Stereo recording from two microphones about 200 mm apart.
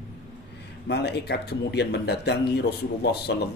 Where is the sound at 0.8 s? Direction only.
55° left (ahead or behind).